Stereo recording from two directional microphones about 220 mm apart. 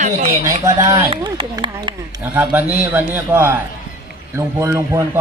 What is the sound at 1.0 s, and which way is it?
Speech, 25° right (ahead or behind).